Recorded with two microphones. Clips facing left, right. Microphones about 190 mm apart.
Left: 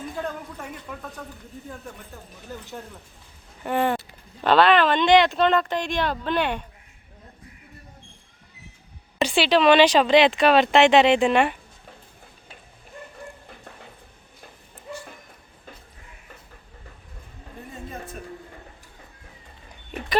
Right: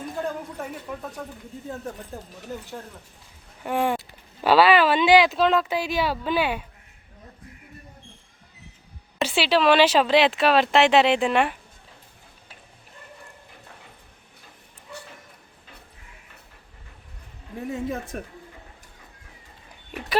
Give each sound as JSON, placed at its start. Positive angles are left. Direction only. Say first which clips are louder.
{"t": 3.6, "sound": "speech", "louder": "left 1 dB", "side_deg": -10}
{"t": 9.1, "sound": "speech", "louder": "left 2 dB", "side_deg": -5}
{"t": 17.7, "sound": "speech", "louder": "right 9 dB", "side_deg": -80}